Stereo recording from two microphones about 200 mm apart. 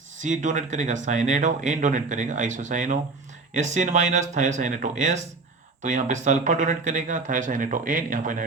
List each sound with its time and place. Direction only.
0.2 s speech: 40° right (ahead or behind)